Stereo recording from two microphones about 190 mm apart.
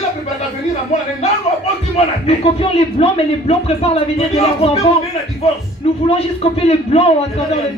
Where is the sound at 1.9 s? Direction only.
30° left (ahead or behind).